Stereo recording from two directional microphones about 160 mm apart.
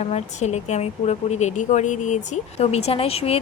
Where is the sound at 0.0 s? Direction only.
45° left (ahead or behind).